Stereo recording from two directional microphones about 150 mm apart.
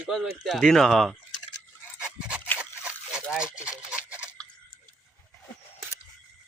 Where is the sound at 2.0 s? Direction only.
5° right (ahead or behind).